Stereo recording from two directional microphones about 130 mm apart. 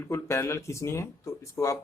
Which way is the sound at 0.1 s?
20° left (ahead or behind).